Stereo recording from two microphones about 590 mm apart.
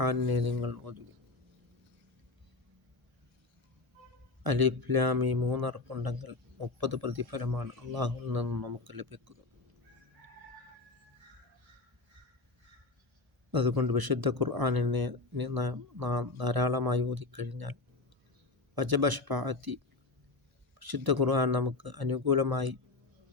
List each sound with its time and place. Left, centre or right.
0.0 s speech: right
4.4 s speech: right
13.5 s speech: right